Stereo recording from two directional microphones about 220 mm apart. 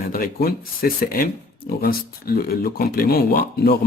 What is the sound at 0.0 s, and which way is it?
Speech, 40° left (ahead or behind).